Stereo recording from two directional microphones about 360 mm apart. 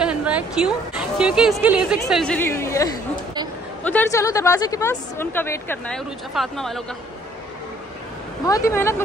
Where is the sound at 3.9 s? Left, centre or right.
Centre.